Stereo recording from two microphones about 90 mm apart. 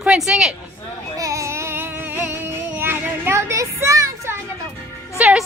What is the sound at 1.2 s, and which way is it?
Music, 35° right (ahead or behind).